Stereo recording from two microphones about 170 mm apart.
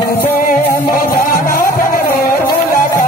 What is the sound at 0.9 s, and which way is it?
Music, 60° left (ahead or behind).